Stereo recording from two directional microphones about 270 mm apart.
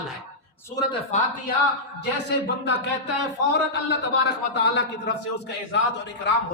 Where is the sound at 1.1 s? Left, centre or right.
Left.